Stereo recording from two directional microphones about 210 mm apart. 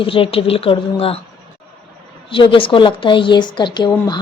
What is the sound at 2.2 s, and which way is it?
A woman's voice, 25° left (ahead or behind).